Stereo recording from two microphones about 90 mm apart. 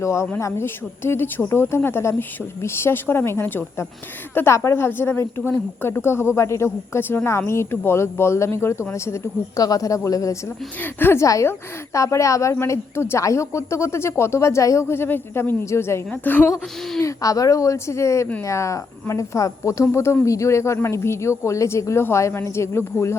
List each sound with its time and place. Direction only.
0.0 s a woman's voice: 35° left (ahead or behind)
9.6 s a woman's voice: 45° left (ahead or behind)
10.8 s speech: 20° left (ahead or behind)
11.3 s a woman's voice: 35° left (ahead or behind); by 16.5 s 20° left (ahead or behind)
17.0 s a woman's voice: 40° left (ahead or behind)